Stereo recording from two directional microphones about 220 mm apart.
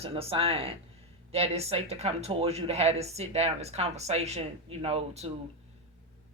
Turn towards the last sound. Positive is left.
turn(degrees=-30)  # may be behind; listen again after turning